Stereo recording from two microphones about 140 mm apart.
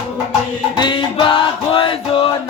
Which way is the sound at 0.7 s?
35° left (ahead or behind).